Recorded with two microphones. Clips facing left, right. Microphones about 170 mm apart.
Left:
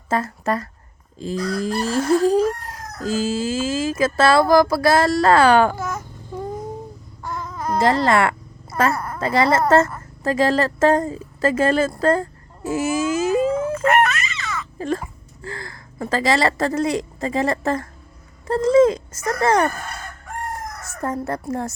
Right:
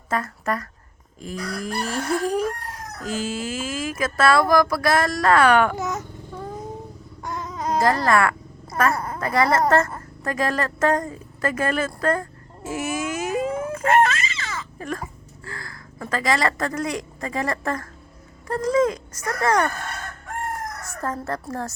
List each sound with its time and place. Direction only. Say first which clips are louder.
0.1 s speech: left 4 dB; 25° left (ahead or behind)
1.2 s chicken: left 7 dB; 25° left (ahead or behind)
5.7 s speech: even; 20° right (ahead or behind)
7.2 s a sound: left 1 dB; 20° right (ahead or behind)
7.8 s chicken: left 2 dB; 25° left (ahead or behind)
10.2 s a woman's voice: left 6 dB; 25° left (ahead or behind)
13.8 s baby cry: right 1 dB; 30° right (ahead or behind)
14.8 s speech: left 8 dB; 25° left (ahead or behind)
15.4 s chicken: left 5 dB; 25° left (ahead or behind)
21.0 s chicken: left 3 dB; 20° left (ahead or behind)